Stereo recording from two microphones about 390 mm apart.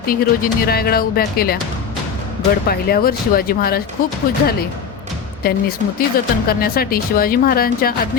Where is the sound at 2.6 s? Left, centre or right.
Left.